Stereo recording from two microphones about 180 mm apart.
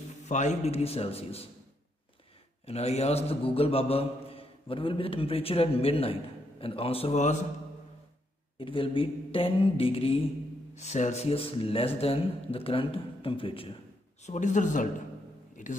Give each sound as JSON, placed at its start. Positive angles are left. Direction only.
{"t": 0.2, "sound": "a man's voice", "side_deg": 40}
{"t": 2.6, "sound": "a man's voice", "side_deg": 35}
{"t": 8.5, "sound": "a man's voice", "side_deg": 30}
{"t": 14.2, "sound": "speech", "side_deg": 40}
{"t": 15.6, "sound": "a sound", "side_deg": 45}